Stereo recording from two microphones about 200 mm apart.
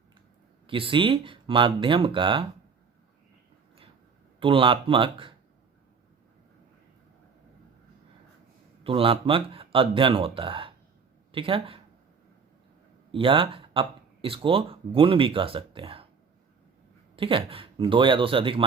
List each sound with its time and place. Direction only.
0.7 s speech: 25° right (ahead or behind)
4.4 s speech: 25° right (ahead or behind)
8.8 s speech: 25° right (ahead or behind)
13.1 s speech: 25° right (ahead or behind)
17.2 s speech: 25° right (ahead or behind)